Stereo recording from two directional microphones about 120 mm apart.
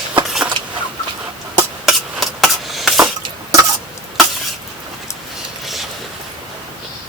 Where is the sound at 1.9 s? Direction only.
Centre (ahead or behind).